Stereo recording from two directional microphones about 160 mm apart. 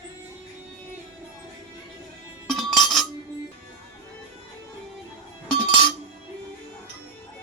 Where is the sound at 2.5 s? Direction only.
Centre (ahead or behind).